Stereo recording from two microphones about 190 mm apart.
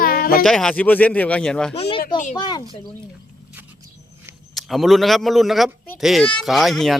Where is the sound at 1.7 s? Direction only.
35° left (ahead or behind).